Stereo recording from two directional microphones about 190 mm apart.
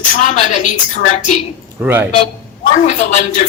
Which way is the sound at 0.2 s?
40° left (ahead or behind).